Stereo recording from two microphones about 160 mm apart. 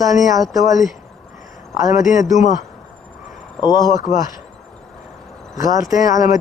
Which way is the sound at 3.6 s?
25° left (ahead or behind).